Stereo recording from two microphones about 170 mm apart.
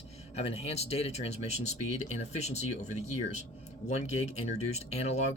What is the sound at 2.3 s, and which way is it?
Speech, 40° left (ahead or behind).